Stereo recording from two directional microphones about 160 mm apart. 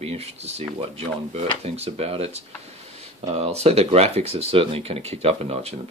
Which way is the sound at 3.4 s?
40° right (ahead or behind).